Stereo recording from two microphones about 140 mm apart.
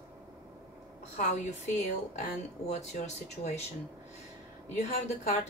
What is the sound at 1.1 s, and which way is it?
Speech, 55° left (ahead or behind).